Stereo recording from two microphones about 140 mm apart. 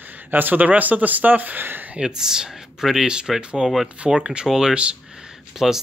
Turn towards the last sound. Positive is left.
turn(degrees=-5)  # may be behind; listen again after turning